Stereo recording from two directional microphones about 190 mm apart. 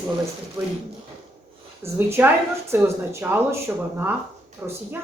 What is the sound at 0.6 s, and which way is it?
Speech, 20° right (ahead or behind).